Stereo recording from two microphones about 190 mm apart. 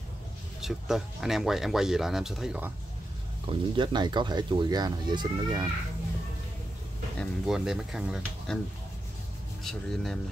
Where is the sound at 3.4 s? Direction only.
25° right (ahead or behind).